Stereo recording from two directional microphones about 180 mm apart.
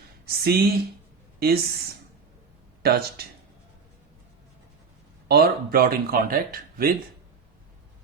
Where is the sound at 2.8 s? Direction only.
60° right (ahead or behind).